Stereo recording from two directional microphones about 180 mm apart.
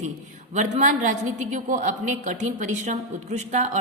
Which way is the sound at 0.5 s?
45° right (ahead or behind).